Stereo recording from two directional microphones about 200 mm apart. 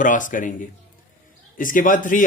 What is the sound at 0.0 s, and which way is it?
Speech, 40° left (ahead or behind).